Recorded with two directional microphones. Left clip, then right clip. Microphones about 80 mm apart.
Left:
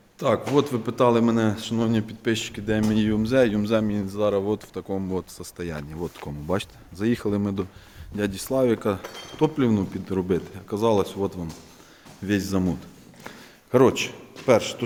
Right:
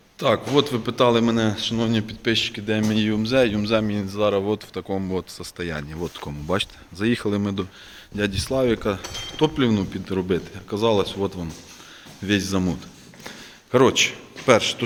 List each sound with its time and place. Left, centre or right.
0.2 s a man's voice: centre
1.2 s speech: left
1.9 s speech: left
2.3 s speech: left
3.8 s speech: centre
6.5 s speech: left
9.3 s speech: centre; by 11.2 s left
11.2 s a man's voice: centre
12.2 s speech: left
13.2 s a sound: left
14.1 s a man's voice: centre